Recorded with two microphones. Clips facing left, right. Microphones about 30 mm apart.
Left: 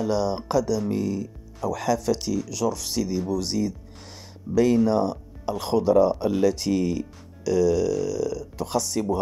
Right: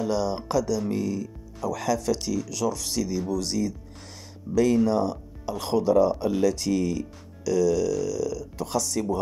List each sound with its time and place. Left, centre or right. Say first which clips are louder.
0.0 s speech: left 2 dB; centre
4.8 s speech: left 2 dB; centre